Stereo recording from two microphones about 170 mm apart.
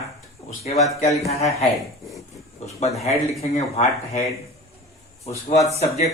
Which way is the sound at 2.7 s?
40° left (ahead or behind).